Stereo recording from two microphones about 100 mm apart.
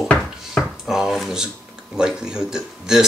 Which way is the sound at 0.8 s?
5° right (ahead or behind).